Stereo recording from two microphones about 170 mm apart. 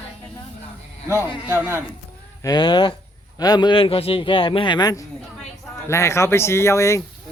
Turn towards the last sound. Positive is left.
turn(degrees=15)  # may be behind; listen again after turning